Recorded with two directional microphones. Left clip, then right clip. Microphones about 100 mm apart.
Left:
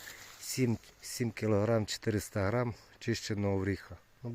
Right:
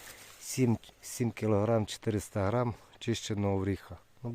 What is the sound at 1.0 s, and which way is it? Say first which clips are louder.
Speech: right 1 dB; 25° right (ahead or behind).